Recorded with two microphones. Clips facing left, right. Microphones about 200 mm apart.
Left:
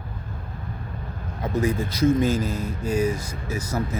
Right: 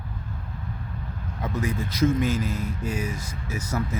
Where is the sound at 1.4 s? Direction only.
30° left (ahead or behind).